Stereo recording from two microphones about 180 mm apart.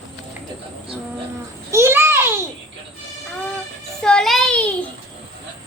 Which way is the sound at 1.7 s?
15° right (ahead or behind).